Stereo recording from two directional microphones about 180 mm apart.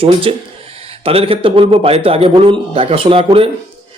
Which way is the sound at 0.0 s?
30° right (ahead or behind).